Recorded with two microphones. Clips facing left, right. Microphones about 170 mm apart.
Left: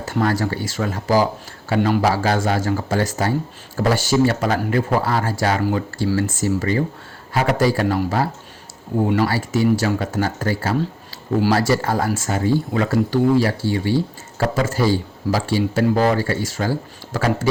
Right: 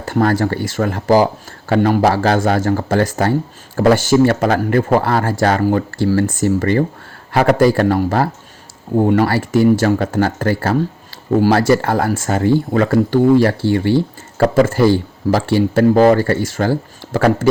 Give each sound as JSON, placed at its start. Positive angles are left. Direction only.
{"t": 0.0, "sound": "speech", "side_deg": -55}